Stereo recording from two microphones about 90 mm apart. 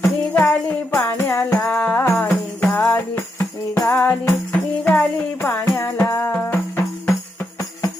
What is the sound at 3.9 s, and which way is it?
Music, 20° left (ahead or behind).